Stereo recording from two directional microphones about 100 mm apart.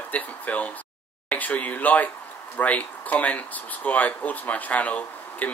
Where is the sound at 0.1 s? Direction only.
15° left (ahead or behind).